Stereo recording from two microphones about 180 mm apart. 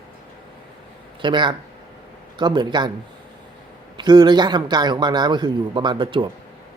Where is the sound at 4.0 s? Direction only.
25° right (ahead or behind).